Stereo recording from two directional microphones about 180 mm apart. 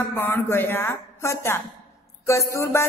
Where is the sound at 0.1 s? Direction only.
10° left (ahead or behind).